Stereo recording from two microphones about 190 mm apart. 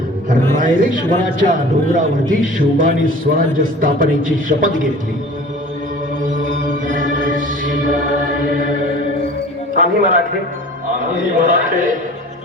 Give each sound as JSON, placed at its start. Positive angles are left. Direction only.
{"t": 0.5, "sound": "a man's voice", "side_deg": -45}
{"t": 6.2, "sound": "mantra", "side_deg": -45}
{"t": 6.8, "sound": "music", "side_deg": -45}
{"t": 9.7, "sound": "a man's voice", "side_deg": -45}
{"t": 11.3, "sound": "a man's voice", "side_deg": -45}